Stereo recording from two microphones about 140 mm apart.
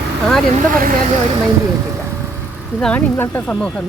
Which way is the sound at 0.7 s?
75° right (ahead or behind).